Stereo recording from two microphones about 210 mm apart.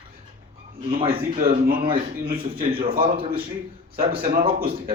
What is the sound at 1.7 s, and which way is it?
Speech, 25° right (ahead or behind).